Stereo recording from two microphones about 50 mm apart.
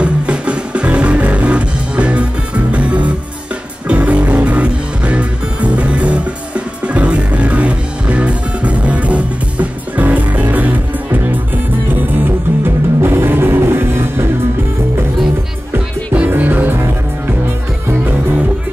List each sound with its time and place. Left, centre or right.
0.0 s music: right
16.3 s music: right